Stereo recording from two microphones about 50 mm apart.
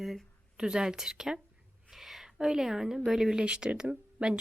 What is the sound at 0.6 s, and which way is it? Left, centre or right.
Speech, centre.